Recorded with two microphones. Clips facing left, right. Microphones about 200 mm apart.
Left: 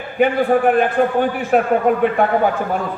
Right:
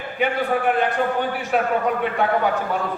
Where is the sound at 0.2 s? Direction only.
50° left (ahead or behind).